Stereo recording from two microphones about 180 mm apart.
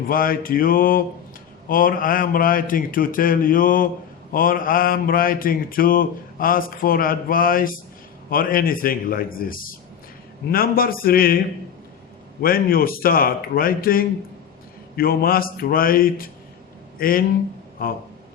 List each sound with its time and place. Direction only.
0.1 s mantra: 50° left (ahead or behind)
10.5 s speech: 55° left (ahead or behind)
12.4 s speech: 55° left (ahead or behind)
14.9 s mantra: 55° left (ahead or behind)